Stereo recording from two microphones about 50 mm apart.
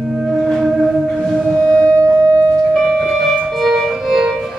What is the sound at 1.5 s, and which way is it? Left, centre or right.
Music, centre.